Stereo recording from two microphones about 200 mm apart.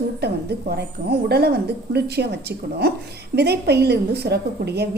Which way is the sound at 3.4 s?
55° right (ahead or behind).